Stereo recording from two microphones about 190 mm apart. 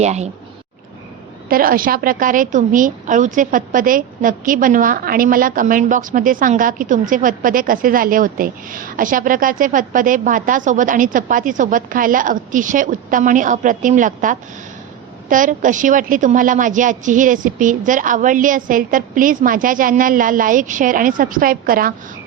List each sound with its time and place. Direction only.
0.0 s speech: 35° right (ahead or behind)
1.5 s a woman's voice: 50° right (ahead or behind)